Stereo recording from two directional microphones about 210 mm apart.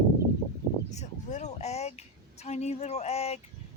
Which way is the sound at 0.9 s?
35° left (ahead or behind).